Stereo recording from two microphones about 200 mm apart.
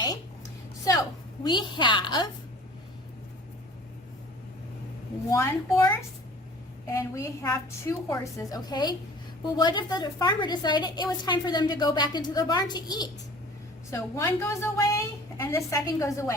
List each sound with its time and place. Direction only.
1.5 s a woman's voice: 20° left (ahead or behind)
5.3 s a woman's voice: 15° left (ahead or behind)